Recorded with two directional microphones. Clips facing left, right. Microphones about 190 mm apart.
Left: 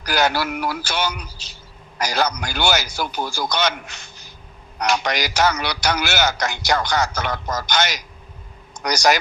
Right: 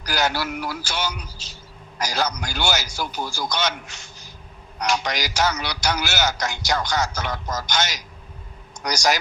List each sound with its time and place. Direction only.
0.0 s a man's voice: 60° left (ahead or behind)